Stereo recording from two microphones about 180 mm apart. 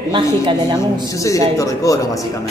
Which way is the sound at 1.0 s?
20° left (ahead or behind).